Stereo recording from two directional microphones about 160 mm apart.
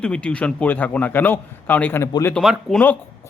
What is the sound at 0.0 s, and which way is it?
A man's voice, 5° left (ahead or behind).